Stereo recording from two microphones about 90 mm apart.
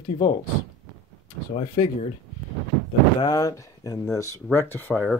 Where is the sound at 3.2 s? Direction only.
40° left (ahead or behind).